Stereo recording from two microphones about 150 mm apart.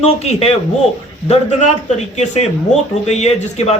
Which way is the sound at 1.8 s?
50° left (ahead or behind).